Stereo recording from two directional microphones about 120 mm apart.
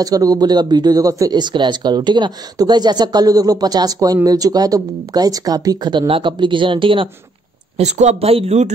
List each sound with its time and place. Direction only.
0.0 s speech: 30° right (ahead or behind); by 7.1 s 45° right (ahead or behind)
7.7 s speech: 70° right (ahead or behind)